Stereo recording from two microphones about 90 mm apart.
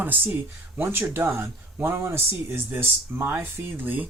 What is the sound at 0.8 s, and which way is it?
Speech, 25° right (ahead or behind).